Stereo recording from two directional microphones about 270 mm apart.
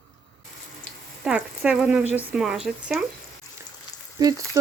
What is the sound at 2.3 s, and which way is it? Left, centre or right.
Speech, centre.